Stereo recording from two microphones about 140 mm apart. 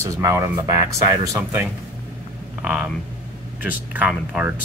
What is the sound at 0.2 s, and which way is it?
Speech, 20° right (ahead or behind).